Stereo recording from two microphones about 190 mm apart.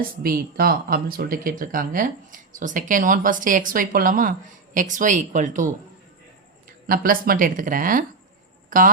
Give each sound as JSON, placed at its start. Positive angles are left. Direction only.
{"t": 0.2, "sound": "speech", "side_deg": -50}
{"t": 6.8, "sound": "speech", "side_deg": -50}